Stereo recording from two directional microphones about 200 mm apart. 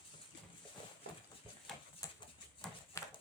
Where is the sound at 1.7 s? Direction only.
Centre (ahead or behind).